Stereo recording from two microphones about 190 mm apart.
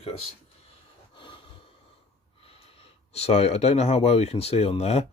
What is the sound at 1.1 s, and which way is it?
Snort, 25° left (ahead or behind).